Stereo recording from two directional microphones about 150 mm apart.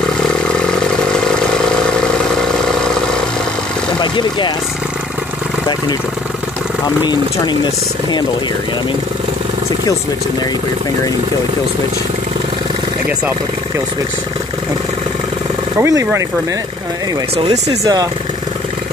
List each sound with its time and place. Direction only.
0.2 s vehicle: 5° left (ahead or behind)
4.0 s speech: 30° left (ahead or behind)
7.0 s speech: 30° left (ahead or behind)
15.8 s speech: 20° right (ahead or behind)
17.6 s speech: 25° right (ahead or behind)